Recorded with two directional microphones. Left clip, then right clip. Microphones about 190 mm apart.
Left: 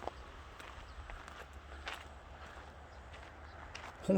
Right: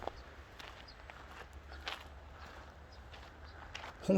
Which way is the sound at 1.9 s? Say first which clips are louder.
Right 1 dB; 15° right (ahead or behind).